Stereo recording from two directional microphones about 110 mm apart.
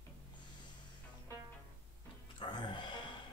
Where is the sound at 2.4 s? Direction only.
45° left (ahead or behind).